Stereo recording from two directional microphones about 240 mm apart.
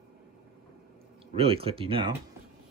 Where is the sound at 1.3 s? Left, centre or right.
Right.